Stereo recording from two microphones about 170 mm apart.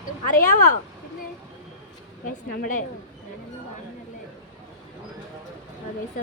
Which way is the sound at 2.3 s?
50° left (ahead or behind).